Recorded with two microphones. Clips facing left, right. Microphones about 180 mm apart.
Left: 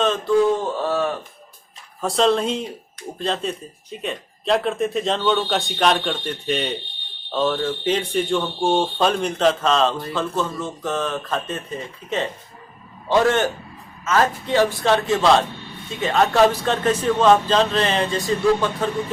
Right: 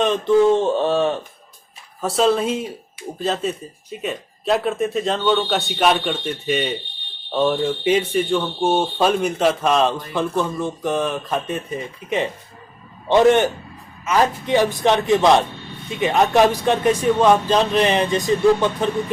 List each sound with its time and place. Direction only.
0.0 s speech: 20° right (ahead or behind)
2.0 s a man's voice: 5° right (ahead or behind)